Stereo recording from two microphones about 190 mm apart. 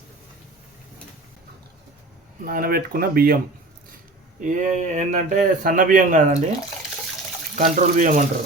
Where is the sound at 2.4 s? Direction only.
50° right (ahead or behind).